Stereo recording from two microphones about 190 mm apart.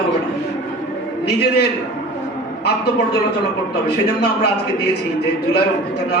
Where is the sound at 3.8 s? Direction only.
60° left (ahead or behind).